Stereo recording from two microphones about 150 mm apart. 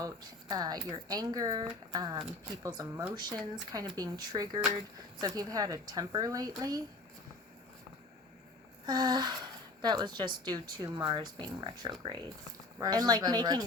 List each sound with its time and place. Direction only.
0.0 s a woman's voice: 25° right (ahead or behind)
8.9 s a woman's voice: 25° right (ahead or behind)